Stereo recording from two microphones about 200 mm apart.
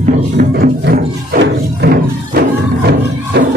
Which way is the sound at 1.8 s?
55° right (ahead or behind).